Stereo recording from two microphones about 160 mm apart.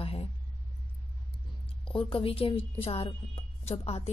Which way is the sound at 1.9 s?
35° left (ahead or behind).